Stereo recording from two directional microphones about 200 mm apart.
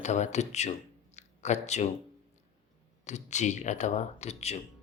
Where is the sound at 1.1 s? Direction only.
35° left (ahead or behind).